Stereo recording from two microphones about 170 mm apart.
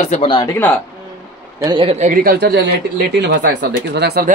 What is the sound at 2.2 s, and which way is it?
Speech, 75° right (ahead or behind).